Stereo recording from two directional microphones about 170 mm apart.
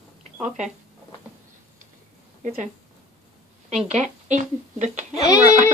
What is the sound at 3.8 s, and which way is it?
Speech, 45° right (ahead or behind).